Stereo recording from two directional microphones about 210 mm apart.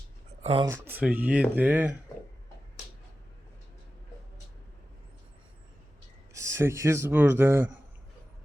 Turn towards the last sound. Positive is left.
turn(degrees=-10)  # may be behind; listen again after turning